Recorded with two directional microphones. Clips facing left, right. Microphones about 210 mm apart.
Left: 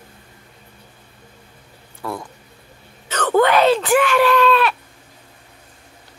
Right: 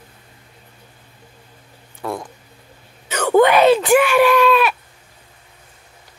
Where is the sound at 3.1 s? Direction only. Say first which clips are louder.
Right 3 dB; 10° right (ahead or behind).